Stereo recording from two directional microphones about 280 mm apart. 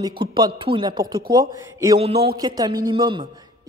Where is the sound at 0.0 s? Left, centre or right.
Centre.